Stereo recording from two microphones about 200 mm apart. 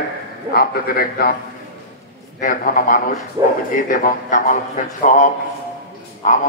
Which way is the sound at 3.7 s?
40° left (ahead or behind).